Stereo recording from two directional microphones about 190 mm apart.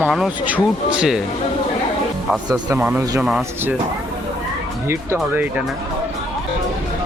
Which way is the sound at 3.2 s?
Centre (ahead or behind).